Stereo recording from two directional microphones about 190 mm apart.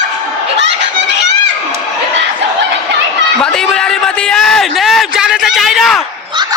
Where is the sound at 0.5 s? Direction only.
65° right (ahead or behind).